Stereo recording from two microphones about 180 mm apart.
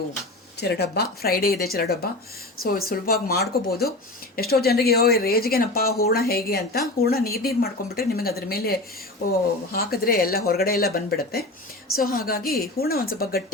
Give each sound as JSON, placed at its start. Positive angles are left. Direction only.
{"t": 0.6, "sound": "a woman's voice", "side_deg": 65}